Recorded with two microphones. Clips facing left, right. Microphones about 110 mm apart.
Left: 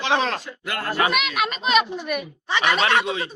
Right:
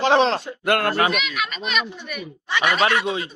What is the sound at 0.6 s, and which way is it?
Speech, 65° right (ahead or behind).